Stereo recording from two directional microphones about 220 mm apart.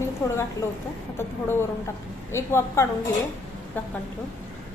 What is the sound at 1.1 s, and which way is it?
Speech, 10° left (ahead or behind).